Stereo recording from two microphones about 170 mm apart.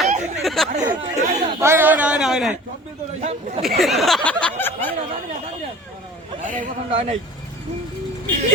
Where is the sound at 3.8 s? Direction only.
Centre (ahead or behind).